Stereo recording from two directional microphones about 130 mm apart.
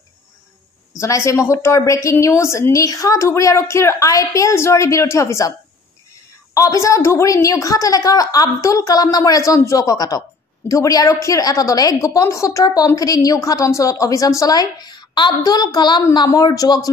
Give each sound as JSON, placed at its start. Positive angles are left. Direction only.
{"t": 0.9, "sound": "a woman's voice", "side_deg": 20}
{"t": 6.5, "sound": "a woman's voice", "side_deg": 25}